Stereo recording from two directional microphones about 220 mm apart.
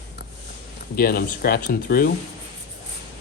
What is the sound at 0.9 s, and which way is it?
Speech, 45° left (ahead or behind).